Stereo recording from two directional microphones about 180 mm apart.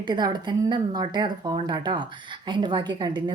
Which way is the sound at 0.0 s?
25° right (ahead or behind).